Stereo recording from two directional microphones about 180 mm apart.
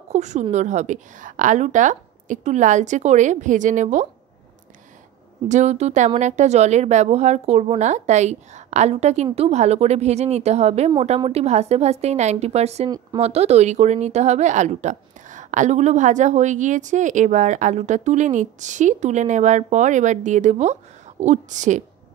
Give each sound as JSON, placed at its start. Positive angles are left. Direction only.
{"t": 0.1, "sound": "a woman's voice", "side_deg": -40}
{"t": 5.5, "sound": "a woman's voice", "side_deg": -40}